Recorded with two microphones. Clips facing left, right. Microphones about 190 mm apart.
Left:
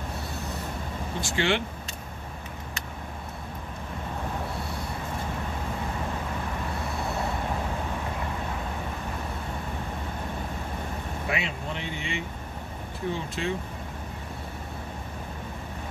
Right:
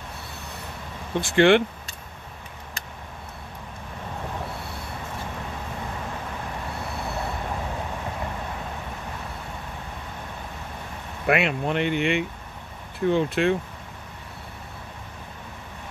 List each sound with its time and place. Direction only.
1.2 s speech: 55° right (ahead or behind)
11.2 s speech: 65° right (ahead or behind)